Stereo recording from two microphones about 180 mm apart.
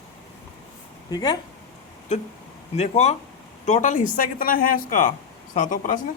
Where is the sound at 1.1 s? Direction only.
20° left (ahead or behind).